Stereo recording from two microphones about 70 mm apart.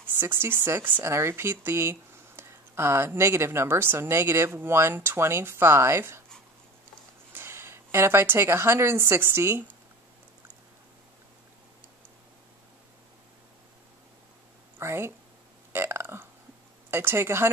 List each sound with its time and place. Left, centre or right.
0.1 s speech: right
7.3 s speech: right
14.8 s speech: right
15.7 s burping: right
16.9 s speech: right